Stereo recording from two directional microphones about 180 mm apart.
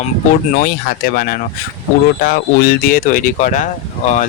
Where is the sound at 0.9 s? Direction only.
55° left (ahead or behind).